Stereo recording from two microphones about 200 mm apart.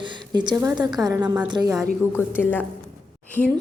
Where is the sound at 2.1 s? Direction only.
10° left (ahead or behind).